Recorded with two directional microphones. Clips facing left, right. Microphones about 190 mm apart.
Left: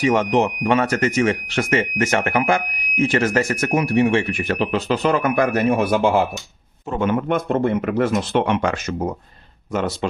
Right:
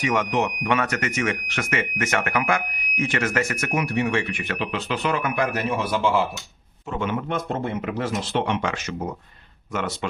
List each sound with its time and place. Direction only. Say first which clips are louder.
0.0 s speech: left 6 dB; 30° left (ahead or behind)